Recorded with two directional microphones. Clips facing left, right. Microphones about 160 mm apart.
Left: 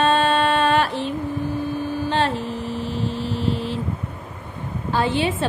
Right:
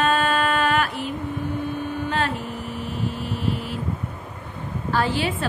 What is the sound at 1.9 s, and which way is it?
Mains hum, 30° left (ahead or behind).